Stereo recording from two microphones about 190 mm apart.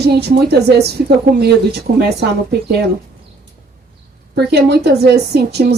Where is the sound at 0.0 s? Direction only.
60° right (ahead or behind).